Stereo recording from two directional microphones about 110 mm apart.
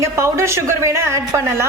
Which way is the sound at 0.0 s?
25° right (ahead or behind).